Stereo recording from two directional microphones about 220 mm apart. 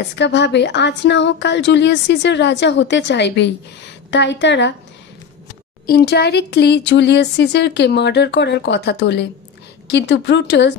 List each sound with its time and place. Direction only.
0.1 s a woman's voice: 50° left (ahead or behind)
5.9 s a woman's voice: 45° left (ahead or behind)